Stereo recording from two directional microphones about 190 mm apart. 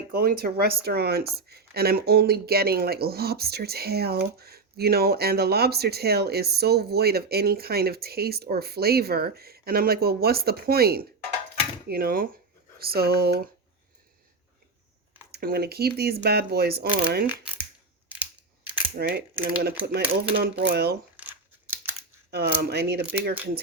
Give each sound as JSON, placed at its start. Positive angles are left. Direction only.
{"t": 0.1, "sound": "speech", "side_deg": -55}
{"t": 15.3, "sound": "speech", "side_deg": -55}
{"t": 18.9, "sound": "speech", "side_deg": -55}
{"t": 21.2, "sound": "crumpling", "side_deg": -10}
{"t": 22.3, "sound": "speech", "side_deg": -60}